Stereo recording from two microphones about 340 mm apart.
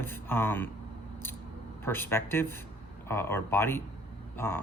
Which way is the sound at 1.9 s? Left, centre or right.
Centre.